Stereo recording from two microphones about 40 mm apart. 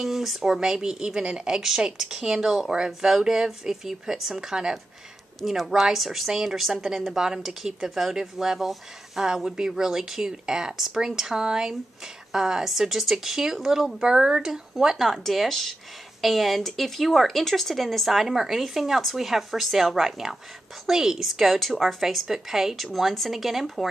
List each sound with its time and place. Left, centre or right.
0.0 s speech: centre
0.6 s a woman's voice: centre
2.7 s a woman's voice: right
15.0 s a woman's voice: centre
21.3 s a woman's voice: centre